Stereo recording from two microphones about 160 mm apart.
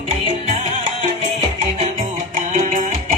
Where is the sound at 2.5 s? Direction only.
50° right (ahead or behind).